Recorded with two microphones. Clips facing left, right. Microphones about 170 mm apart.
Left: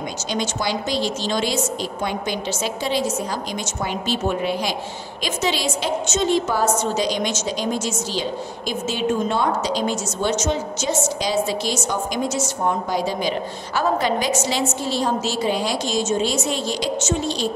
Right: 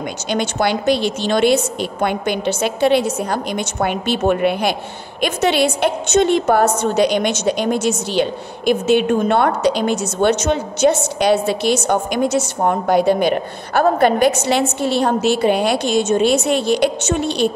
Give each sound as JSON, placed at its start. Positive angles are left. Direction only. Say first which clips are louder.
{"t": 0.3, "sound": "a woman's voice", "louder": "right 6 dB", "side_deg": -60}